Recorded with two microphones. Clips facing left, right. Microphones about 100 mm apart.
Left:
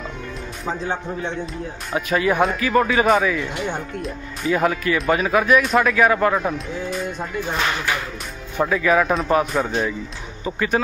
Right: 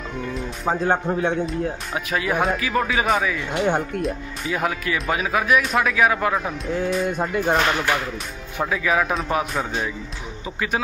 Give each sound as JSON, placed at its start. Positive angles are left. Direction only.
{"t": 0.7, "sound": "speech", "side_deg": -45}
{"t": 1.4, "sound": "speech", "side_deg": 0}
{"t": 3.5, "sound": "speech", "side_deg": -50}
{"t": 4.0, "sound": "speech", "side_deg": 0}
{"t": 7.1, "sound": "speech", "side_deg": -55}
{"t": 8.5, "sound": "speech", "side_deg": -5}